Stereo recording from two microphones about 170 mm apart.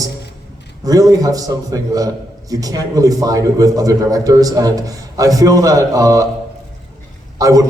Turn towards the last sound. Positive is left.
turn(degrees=-20)  # may be behind; listen again after turning